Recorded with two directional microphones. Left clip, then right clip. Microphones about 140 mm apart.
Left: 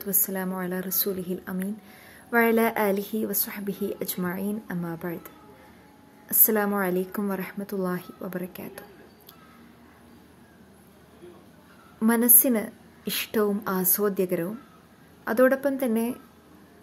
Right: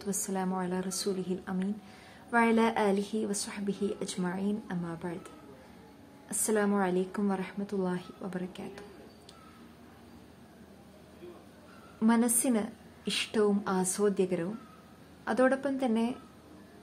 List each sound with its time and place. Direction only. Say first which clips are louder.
0.0 s a woman's voice: left 3 dB; 25° left (ahead or behind)
12.0 s speech: left 5 dB; 30° left (ahead or behind)